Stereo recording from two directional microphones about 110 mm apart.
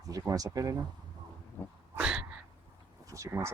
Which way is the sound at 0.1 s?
35° right (ahead or behind).